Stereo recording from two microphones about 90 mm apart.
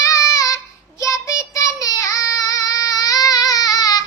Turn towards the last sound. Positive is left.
turn(degrees=45)  # may be behind; listen again after turning